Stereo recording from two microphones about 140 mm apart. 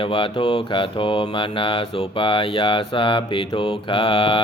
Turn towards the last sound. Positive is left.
turn(degrees=40)  # may be behind; listen again after turning